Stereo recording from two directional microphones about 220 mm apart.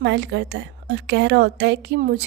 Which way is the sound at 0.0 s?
55° right (ahead or behind).